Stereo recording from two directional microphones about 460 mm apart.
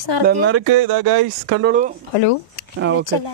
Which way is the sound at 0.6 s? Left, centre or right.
Right.